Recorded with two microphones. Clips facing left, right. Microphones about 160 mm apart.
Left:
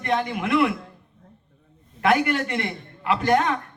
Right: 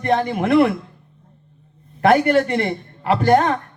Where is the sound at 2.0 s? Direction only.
40° right (ahead or behind).